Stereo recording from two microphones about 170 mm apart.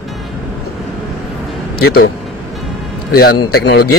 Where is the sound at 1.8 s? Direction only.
65° left (ahead or behind).